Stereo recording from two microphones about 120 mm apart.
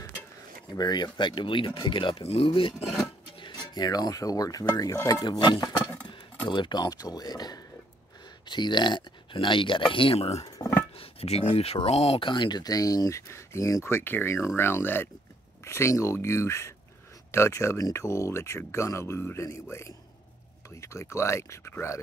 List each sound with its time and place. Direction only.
0.7 s speech: 35° left (ahead or behind); by 10.4 s 55° left (ahead or behind)
10.4 s music: 25° left (ahead or behind)
11.0 s speech: 55° left (ahead or behind); by 22.0 s 20° left (ahead or behind)